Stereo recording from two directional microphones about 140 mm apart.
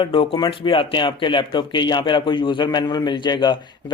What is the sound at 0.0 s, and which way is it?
Speech, 40° left (ahead or behind).